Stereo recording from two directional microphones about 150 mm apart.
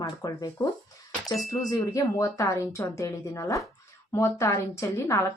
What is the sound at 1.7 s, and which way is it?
A woman's voice, 25° left (ahead or behind).